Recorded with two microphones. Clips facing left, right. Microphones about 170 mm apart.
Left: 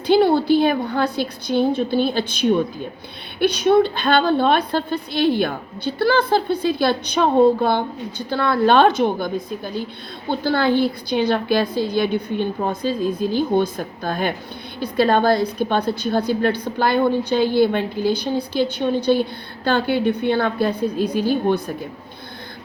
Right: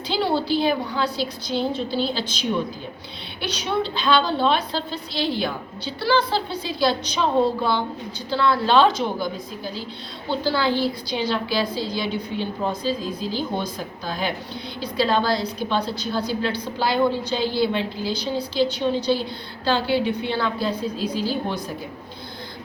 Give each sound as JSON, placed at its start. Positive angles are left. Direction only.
{"t": 0.1, "sound": "a woman's voice", "side_deg": 55}